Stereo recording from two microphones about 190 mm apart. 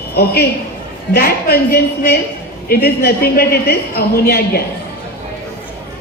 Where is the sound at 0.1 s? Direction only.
55° left (ahead or behind).